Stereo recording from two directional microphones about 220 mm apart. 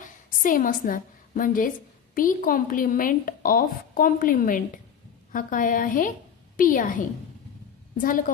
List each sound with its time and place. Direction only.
0.0 s a woman's voice: 40° left (ahead or behind)